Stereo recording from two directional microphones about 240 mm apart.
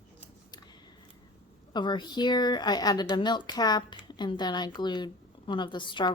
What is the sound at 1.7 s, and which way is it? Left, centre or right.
A woman's voice, centre.